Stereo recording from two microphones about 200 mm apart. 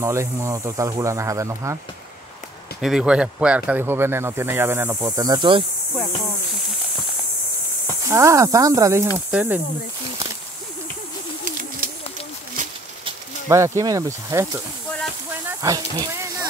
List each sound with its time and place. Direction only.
0.0 s speech: 15° right (ahead or behind)
2.8 s speech: centre (ahead or behind); by 5.6 s 20° right (ahead or behind)
8.1 s speech: 15° right (ahead or behind)
13.5 s speech: 15° right (ahead or behind)
15.4 s snake: 15° right (ahead or behind)